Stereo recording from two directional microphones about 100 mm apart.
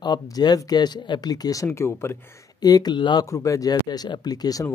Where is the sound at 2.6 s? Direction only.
40° left (ahead or behind).